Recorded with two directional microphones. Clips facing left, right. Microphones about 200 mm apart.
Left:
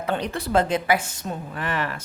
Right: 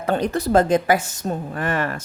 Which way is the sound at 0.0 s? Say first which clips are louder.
Right 5 dB; 45° right (ahead or behind).